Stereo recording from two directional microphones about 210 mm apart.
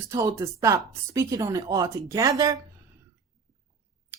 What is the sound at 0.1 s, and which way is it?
Speech, 15° right (ahead or behind).